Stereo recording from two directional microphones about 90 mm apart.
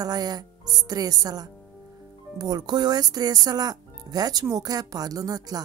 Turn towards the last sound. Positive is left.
turn(degrees=-45)  # may be behind; listen again after turning